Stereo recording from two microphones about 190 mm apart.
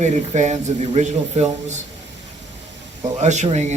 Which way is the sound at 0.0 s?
35° right (ahead or behind).